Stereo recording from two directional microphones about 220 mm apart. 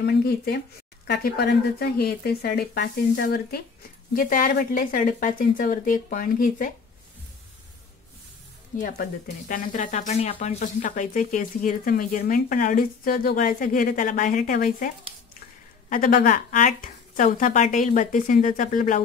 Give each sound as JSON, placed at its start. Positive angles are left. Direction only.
{"t": 0.0, "sound": "speech", "side_deg": 45}
{"t": 8.7, "sound": "speech", "side_deg": 40}
{"t": 15.9, "sound": "speech", "side_deg": 40}